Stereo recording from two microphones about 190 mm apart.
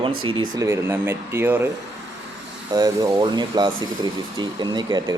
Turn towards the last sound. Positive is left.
turn(degrees=-20)  # may be behind; listen again after turning